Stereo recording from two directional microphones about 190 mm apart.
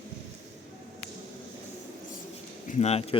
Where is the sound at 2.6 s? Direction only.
35° left (ahead or behind).